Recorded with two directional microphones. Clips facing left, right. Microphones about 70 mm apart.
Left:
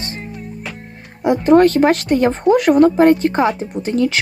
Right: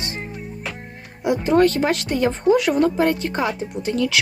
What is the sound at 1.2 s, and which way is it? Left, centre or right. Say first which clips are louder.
Speech: left 5 dB; left.